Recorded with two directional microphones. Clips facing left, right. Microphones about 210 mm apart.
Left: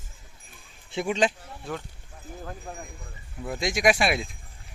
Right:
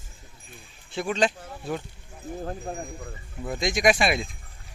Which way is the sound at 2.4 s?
35° right (ahead or behind).